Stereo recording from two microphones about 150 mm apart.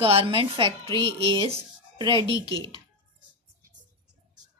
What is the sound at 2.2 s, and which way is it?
Speech, 30° left (ahead or behind).